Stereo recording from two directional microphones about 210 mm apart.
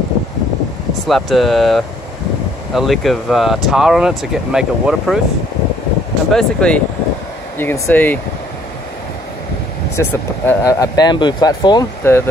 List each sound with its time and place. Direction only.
1.0 s speech: centre (ahead or behind)
6.3 s speech: 5° left (ahead or behind)
9.9 s speech: 10° left (ahead or behind)